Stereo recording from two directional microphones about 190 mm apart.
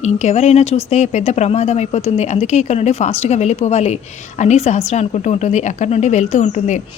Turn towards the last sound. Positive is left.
turn(degrees=40)  # may be behind; listen again after turning